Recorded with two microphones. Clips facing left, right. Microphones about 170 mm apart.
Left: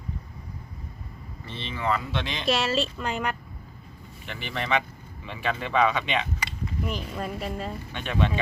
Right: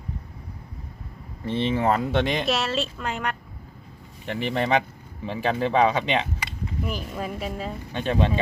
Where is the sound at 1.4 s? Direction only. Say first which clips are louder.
Right 7 dB; 50° right (ahead or behind).